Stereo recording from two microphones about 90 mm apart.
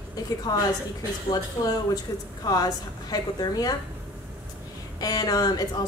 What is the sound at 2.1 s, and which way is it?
A woman's voice, 40° left (ahead or behind).